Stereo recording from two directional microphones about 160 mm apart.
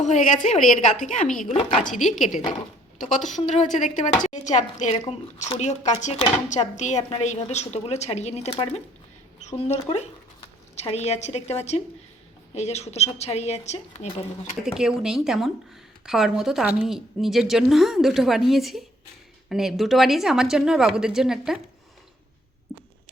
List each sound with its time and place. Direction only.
0.0 s speech: 50° left (ahead or behind)
3.2 s speech: 50° left (ahead or behind)
14.6 s a woman's voice: 5° right (ahead or behind)